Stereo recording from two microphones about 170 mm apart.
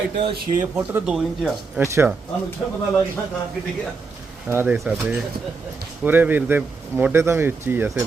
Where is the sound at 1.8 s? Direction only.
15° right (ahead or behind).